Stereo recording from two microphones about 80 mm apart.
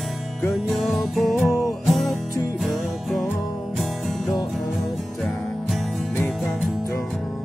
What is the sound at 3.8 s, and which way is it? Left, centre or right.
Music, centre.